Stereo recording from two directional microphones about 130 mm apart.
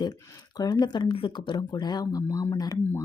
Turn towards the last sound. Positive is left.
turn(degrees=25)  # may be behind; listen again after turning